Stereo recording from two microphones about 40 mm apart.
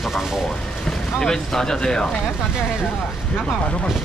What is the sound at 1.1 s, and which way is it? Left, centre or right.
Speech, centre.